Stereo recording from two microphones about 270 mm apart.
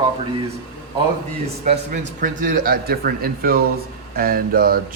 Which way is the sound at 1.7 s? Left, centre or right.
Right.